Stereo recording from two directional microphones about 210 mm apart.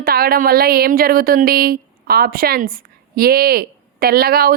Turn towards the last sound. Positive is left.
turn(degrees=-45)  # may be behind; listen again after turning